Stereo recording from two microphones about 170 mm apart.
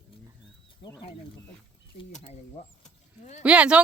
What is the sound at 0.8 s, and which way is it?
Speech, 30° left (ahead or behind).